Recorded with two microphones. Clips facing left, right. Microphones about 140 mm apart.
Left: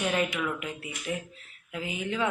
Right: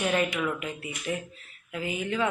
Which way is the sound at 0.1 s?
5° left (ahead or behind).